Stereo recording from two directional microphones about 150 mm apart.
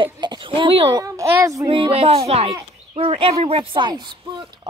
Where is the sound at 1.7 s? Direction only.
35° right (ahead or behind).